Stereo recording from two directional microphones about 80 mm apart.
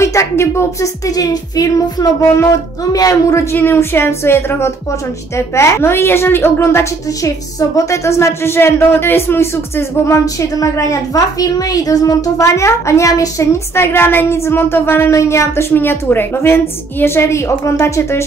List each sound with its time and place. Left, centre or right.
0.0 s speech: left
1.1 s child singing: left
3.5 s a woman's voice: left
10.6 s a woman's voice: left